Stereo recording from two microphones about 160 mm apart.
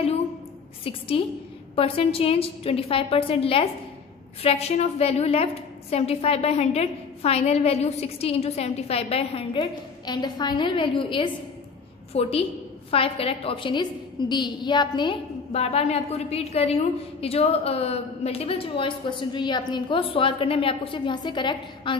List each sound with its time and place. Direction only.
0.8 s a woman's voice: 35° left (ahead or behind)
15.5 s a woman's voice: 40° left (ahead or behind)